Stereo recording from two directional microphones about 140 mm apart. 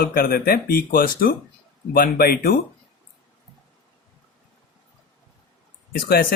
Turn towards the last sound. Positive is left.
turn(degrees=90)